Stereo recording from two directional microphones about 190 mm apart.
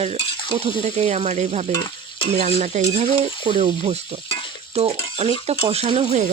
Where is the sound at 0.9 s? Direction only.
35° right (ahead or behind).